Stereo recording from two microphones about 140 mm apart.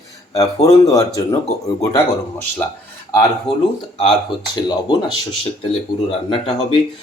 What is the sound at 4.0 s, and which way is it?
Speech, 35° left (ahead or behind).